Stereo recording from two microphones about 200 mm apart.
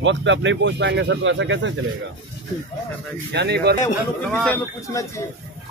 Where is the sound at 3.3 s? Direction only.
55° right (ahead or behind).